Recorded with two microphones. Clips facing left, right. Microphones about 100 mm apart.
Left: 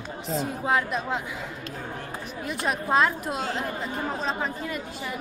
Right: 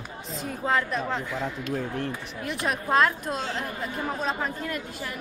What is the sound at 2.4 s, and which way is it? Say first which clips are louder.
Speech: even; centre (ahead or behind).